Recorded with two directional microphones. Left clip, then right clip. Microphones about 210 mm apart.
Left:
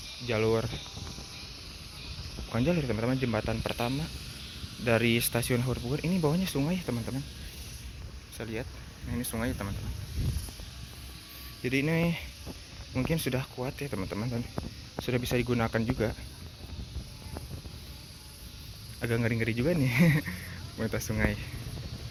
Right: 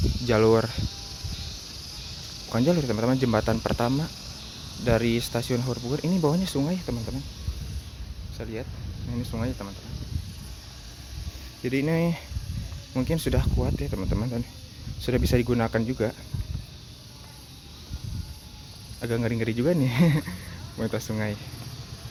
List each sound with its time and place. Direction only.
0.3 s speech: 30° right (ahead or behind)
2.5 s speech: 15° right (ahead or behind)
4.9 s speech: 10° right (ahead or behind)
8.4 s speech: centre (ahead or behind)
11.6 s speech: 15° right (ahead or behind)
13.6 s speech: 5° right (ahead or behind)
15.0 s speech: 20° right (ahead or behind)
18.9 s speech: 5° right (ahead or behind)